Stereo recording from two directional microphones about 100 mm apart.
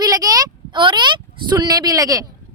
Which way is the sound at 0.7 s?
50° right (ahead or behind).